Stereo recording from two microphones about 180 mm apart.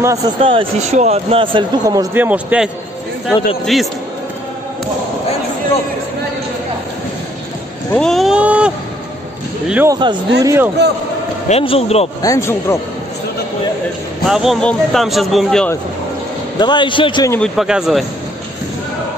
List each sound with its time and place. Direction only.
0.0 s a man's voice: 20° right (ahead or behind)
0.4 s speech: 30° right (ahead or behind)
2.1 s a man's voice: 10° right (ahead or behind)
7.9 s a sound: 5° left (ahead or behind)
9.8 s a man's voice: 25° right (ahead or behind)
11.4 s a man's voice: 35° left (ahead or behind)
12.2 s a man's voice: 15° left (ahead or behind)
14.3 s speech: centre (ahead or behind)
16.5 s a man's voice: 25° left (ahead or behind)
17.6 s speech: 5° right (ahead or behind)